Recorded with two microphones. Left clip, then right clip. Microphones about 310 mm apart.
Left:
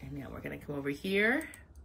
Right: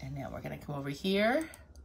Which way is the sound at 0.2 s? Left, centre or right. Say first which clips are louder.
Right 2 dB; centre.